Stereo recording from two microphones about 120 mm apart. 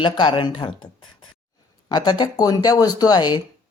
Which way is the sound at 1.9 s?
35° left (ahead or behind).